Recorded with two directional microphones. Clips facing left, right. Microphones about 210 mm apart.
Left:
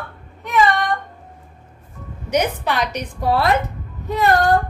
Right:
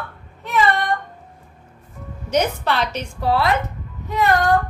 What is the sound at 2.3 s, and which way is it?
Speech, 10° left (ahead or behind).